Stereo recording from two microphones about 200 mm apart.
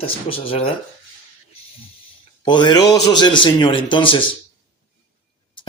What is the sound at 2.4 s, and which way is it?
Speech, 25° left (ahead or behind).